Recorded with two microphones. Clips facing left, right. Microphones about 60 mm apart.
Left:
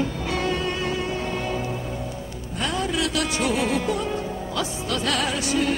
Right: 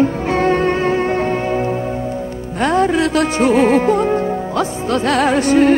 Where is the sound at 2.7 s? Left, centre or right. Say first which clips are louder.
Right 11 dB; right.